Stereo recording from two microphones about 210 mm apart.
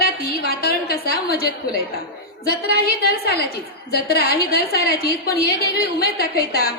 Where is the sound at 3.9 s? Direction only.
50° left (ahead or behind).